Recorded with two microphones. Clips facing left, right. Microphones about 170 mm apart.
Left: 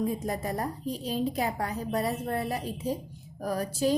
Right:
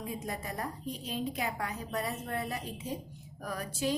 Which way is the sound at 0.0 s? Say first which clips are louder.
Left 8 dB; 40° left (ahead or behind).